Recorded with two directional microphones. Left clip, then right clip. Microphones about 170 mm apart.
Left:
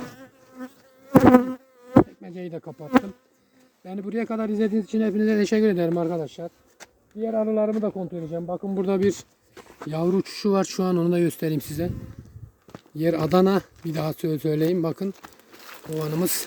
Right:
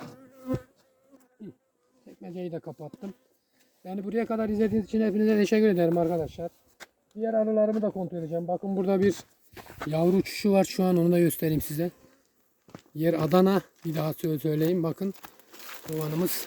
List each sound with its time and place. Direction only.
2.2 s speech: 20° right (ahead or behind)
3.8 s speech: 30° right (ahead or behind)
12.6 s speech: centre (ahead or behind)
15.9 s speech: 5° left (ahead or behind)